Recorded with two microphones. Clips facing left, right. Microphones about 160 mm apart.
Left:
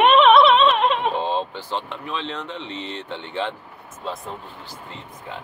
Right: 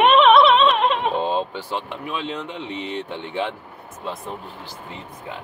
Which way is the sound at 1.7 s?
10° right (ahead or behind).